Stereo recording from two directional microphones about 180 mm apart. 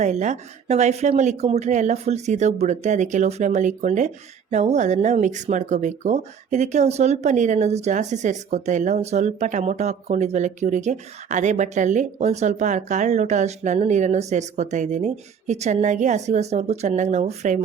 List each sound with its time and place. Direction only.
0.0 s speech: 40° right (ahead or behind)